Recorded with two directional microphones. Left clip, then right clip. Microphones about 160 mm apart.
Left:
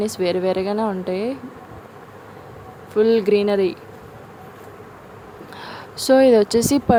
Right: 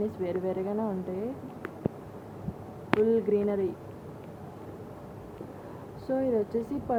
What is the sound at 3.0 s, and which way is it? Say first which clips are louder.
Speech: left 11 dB; 55° left (ahead or behind).